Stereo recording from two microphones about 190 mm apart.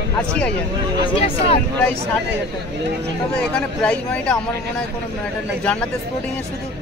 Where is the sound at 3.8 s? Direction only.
5° left (ahead or behind).